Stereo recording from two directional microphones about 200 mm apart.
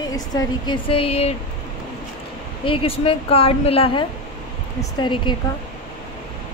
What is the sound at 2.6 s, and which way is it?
A woman's voice, 25° left (ahead or behind).